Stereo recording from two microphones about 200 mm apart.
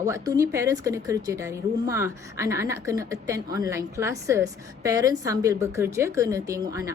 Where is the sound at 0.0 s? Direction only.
15° right (ahead or behind).